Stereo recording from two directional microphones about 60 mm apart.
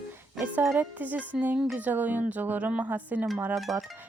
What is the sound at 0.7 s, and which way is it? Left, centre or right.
Speech, right.